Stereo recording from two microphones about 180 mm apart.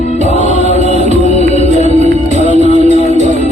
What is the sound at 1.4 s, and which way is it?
Music, 40° right (ahead or behind).